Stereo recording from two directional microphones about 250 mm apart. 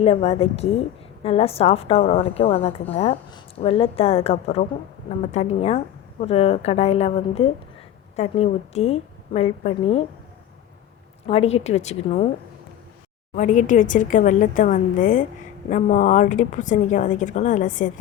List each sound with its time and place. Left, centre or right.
0.0 s a woman's voice: left
11.3 s a woman's voice: left
13.3 s a woman's voice: left